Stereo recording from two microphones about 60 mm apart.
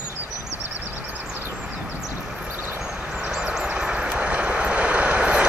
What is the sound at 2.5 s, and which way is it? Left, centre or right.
Vehicle, right.